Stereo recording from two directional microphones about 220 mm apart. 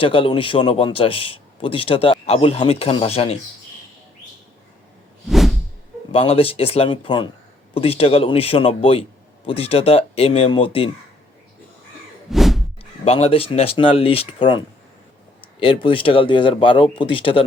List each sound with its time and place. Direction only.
0.0 s a man's voice: 25° left (ahead or behind)
5.3 s a sound: centre (ahead or behind)
6.1 s a man's voice: 25° left (ahead or behind)
12.3 s a sound: centre (ahead or behind)
12.8 s a man's voice: 25° left (ahead or behind)
15.6 s a man's voice: 25° left (ahead or behind)